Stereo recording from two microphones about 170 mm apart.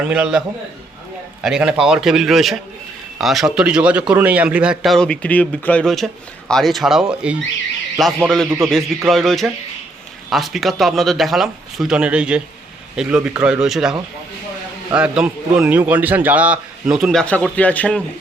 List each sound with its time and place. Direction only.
0.1 s a man's voice: 5° right (ahead or behind)
14.9 s a man's voice: 5° right (ahead or behind)